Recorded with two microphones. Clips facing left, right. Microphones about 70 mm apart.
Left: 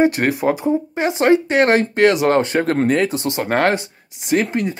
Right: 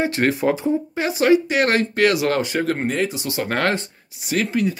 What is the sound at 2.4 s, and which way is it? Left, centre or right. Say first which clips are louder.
Speech: left 5 dB; left.